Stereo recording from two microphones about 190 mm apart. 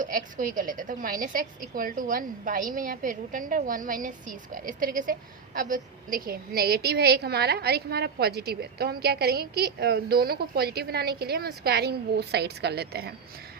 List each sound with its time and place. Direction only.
0.0 s a woman's voice: 45° right (ahead or behind)